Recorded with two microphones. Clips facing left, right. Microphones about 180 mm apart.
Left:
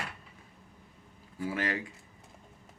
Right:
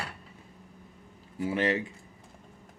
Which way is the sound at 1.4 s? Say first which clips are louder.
Right 5 dB; 20° right (ahead or behind).